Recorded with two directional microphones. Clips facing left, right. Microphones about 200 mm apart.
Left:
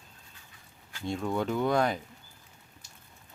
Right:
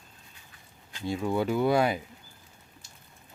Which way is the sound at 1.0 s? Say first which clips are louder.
Right 2 dB; 5° right (ahead or behind).